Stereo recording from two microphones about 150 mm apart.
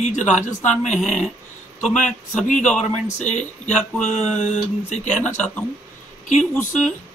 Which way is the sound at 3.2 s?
50° left (ahead or behind).